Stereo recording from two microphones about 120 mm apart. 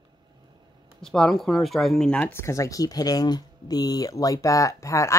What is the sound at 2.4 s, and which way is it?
Speech, 25° left (ahead or behind).